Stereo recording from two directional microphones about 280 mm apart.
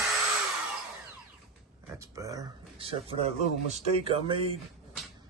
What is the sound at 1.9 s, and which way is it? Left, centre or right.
Speech, centre.